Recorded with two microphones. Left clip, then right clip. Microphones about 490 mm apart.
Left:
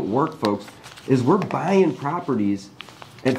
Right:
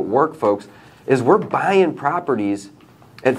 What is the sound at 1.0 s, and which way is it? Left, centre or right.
Speech, right.